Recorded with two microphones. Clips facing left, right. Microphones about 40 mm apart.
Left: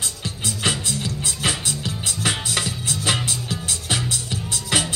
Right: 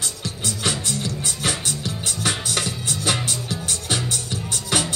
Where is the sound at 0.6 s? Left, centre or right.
Left.